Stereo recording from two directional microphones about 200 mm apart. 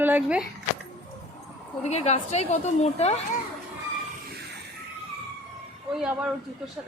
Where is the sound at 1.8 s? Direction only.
35° left (ahead or behind).